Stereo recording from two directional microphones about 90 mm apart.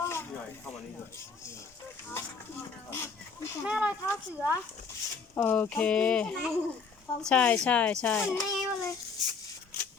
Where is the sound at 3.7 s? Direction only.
15° right (ahead or behind).